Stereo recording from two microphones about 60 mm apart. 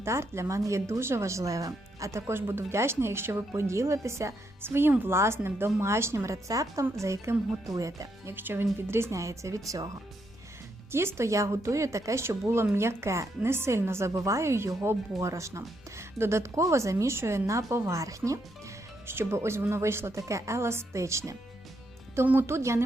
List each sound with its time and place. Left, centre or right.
0.0 s speech: right
7.0 s speech: right
7.7 s speech: right
8.4 s speech: right
8.9 s speech: right
10.9 s speech: right
19.0 s speech: right
22.4 s speech: right